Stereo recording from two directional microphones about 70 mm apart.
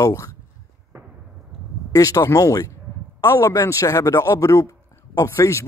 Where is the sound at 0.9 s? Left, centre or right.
Right.